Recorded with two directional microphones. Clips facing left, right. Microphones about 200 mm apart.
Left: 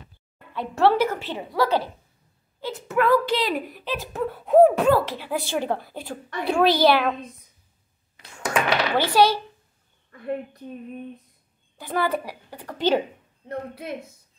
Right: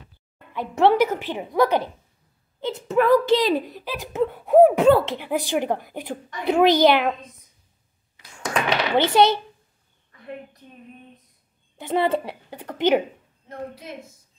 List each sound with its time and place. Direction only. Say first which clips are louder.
0.5 s speech: right 2 dB; 15° right (ahead or behind)
2.9 s a woman's voice: right 3 dB; 20° right (ahead or behind)
4.8 s speech: right 4 dB; 25° right (ahead or behind)
8.6 s speech: right 5 dB; 20° right (ahead or behind)
11.8 s a woman's voice: right 3 dB; 25° right (ahead or behind)
13.5 s a woman's voice: left 3 dB; 60° left (ahead or behind)